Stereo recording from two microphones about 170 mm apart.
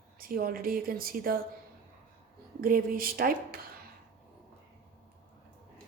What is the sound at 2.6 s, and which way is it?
Speech, 55° right (ahead or behind).